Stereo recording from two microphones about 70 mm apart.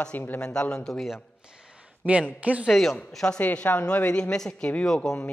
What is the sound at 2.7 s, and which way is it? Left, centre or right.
A woman's voice, centre.